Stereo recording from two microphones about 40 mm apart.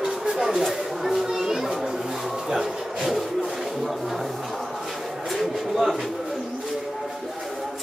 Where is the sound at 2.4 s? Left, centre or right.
Centre.